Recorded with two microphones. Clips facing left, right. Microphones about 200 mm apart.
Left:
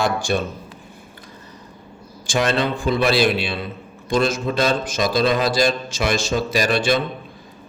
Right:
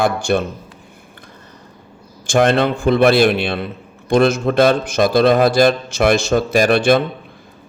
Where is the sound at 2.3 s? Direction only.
55° right (ahead or behind).